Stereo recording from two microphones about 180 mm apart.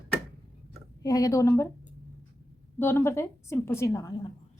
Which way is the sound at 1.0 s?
20° left (ahead or behind).